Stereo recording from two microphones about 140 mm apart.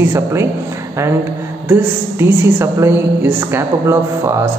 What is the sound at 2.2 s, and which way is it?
A woman's voice, 15° right (ahead or behind).